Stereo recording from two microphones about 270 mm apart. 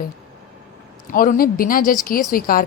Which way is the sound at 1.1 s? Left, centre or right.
Left.